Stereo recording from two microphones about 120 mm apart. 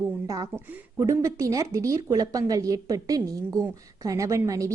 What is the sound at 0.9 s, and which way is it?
A woman's voice, 25° right (ahead or behind).